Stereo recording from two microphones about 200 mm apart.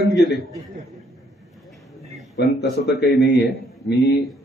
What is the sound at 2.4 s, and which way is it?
Speech, 60° left (ahead or behind).